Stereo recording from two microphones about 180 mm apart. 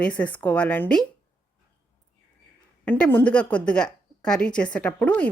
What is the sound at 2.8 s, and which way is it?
A woman's voice, 10° left (ahead or behind).